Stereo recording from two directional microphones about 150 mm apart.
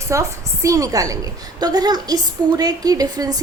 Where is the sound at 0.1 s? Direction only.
20° right (ahead or behind).